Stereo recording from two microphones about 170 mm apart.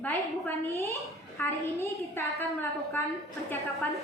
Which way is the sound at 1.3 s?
15° left (ahead or behind).